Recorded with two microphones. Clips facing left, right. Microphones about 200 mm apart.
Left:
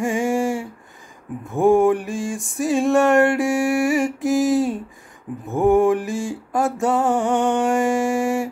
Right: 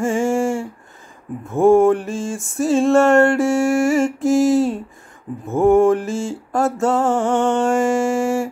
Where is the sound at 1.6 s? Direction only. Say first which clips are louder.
Right 3 dB; 15° left (ahead or behind).